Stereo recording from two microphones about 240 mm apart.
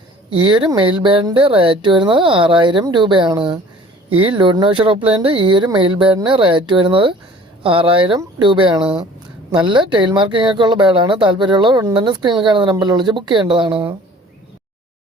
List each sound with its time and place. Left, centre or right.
0.3 s speech: centre